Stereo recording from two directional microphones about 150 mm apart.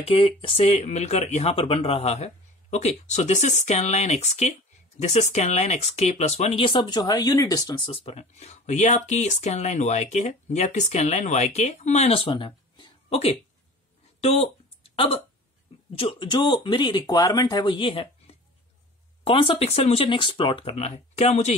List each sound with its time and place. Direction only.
0.0 s speech: 35° left (ahead or behind)
14.2 s a sound: 45° left (ahead or behind)
16.0 s speech: 30° left (ahead or behind)